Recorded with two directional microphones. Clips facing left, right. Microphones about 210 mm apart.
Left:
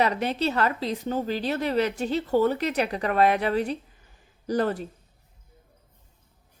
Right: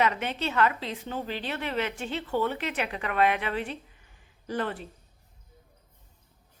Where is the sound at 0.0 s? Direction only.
35° left (ahead or behind).